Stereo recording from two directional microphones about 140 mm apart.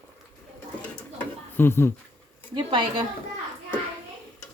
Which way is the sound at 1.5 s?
15° left (ahead or behind).